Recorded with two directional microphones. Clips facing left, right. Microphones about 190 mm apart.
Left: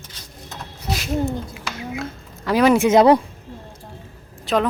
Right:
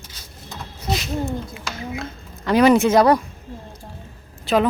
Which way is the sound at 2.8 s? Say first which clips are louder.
Left 2 dB; 20° left (ahead or behind).